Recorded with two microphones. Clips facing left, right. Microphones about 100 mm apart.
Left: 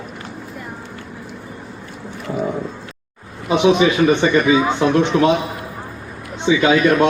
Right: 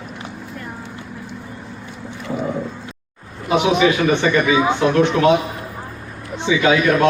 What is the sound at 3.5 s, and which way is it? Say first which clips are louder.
Speech: left 2 dB; 5° right (ahead or behind).